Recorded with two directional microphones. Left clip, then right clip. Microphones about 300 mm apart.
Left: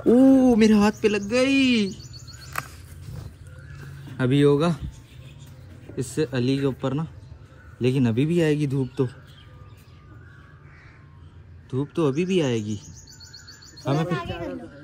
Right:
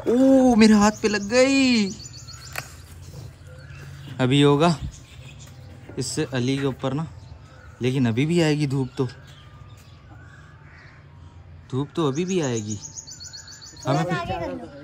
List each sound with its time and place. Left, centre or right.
0.4 s speech: centre
4.2 s speech: centre
5.9 s speech: centre
11.7 s speech: centre
13.8 s speech: centre